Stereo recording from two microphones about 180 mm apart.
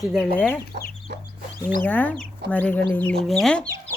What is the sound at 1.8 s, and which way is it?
Speech, 10° left (ahead or behind).